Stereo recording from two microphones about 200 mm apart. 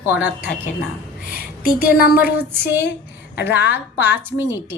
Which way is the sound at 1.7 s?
45° left (ahead or behind).